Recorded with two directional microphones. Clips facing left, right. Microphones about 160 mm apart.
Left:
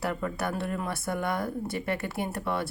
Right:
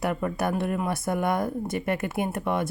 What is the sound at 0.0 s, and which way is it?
Speech, 15° right (ahead or behind).